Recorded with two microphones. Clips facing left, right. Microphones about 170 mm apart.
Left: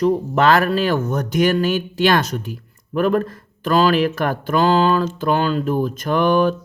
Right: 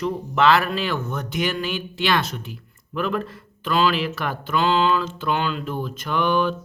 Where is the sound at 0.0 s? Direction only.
45° left (ahead or behind).